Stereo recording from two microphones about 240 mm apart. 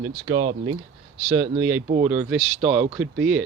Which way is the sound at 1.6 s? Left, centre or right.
Right.